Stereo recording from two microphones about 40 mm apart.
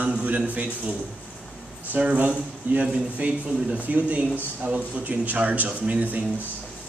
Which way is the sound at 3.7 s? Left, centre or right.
Right.